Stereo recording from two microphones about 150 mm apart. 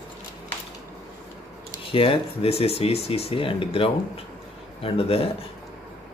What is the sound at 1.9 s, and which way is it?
Speech, 40° left (ahead or behind).